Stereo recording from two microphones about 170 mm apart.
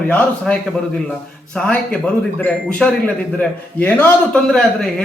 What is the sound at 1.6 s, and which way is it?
Speech, 5° left (ahead or behind).